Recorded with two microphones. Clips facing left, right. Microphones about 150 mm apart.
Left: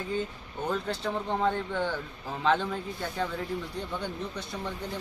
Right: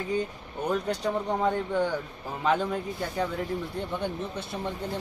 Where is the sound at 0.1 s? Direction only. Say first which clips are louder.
Right 3 dB; 15° right (ahead or behind).